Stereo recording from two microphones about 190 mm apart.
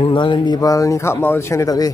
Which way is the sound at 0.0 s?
25° left (ahead or behind).